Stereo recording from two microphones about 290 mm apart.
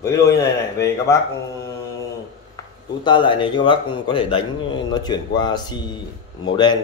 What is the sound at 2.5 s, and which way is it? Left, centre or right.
Speech, centre.